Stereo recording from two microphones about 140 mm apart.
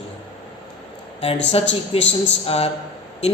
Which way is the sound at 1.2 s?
40° left (ahead or behind).